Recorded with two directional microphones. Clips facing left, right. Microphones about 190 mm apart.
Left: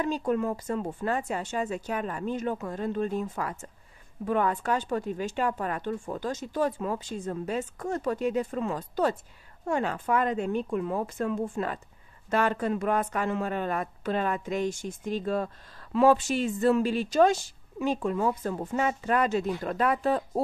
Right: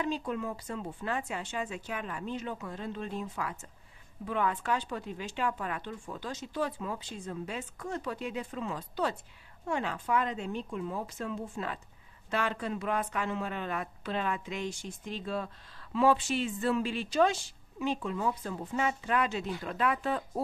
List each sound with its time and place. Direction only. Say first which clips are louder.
0.0 s speech: left 6 dB; 45° left (ahead or behind)